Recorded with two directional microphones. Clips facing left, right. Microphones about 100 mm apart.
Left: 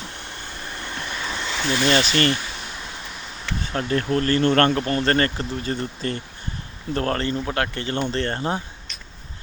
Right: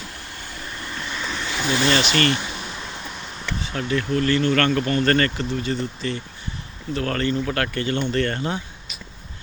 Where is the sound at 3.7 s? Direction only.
40° left (ahead or behind).